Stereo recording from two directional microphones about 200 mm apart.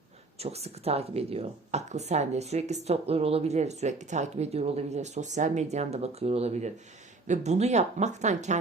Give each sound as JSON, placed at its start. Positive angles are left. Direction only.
{"t": 0.3, "sound": "speech", "side_deg": -30}